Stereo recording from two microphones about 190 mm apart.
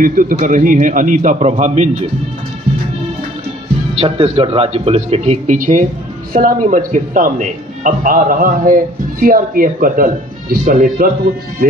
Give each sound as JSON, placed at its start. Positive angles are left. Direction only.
{"t": 0.0, "sound": "a man's voice", "side_deg": -45}
{"t": 4.0, "sound": "a man's voice", "side_deg": -30}